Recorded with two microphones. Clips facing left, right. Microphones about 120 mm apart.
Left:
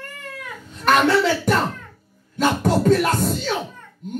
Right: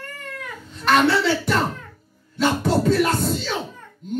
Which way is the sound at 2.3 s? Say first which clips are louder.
Left 1 dB; 50° left (ahead or behind).